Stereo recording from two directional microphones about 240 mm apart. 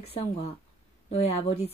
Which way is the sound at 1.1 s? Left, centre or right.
Left.